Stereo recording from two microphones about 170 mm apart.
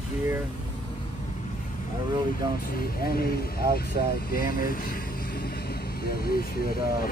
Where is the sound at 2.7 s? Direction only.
60° left (ahead or behind).